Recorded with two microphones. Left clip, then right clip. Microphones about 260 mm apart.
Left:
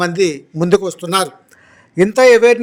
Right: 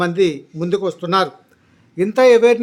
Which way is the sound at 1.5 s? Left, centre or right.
Left.